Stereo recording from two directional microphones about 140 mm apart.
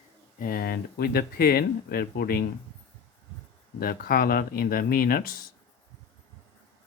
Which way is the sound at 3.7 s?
90° left.